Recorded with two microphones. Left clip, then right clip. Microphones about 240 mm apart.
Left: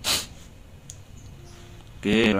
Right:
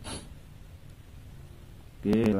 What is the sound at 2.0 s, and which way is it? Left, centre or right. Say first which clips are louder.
Speech: left 5 dB; centre.